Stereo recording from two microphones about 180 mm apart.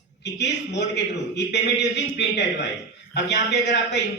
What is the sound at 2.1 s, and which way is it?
Speech, 70° left (ahead or behind).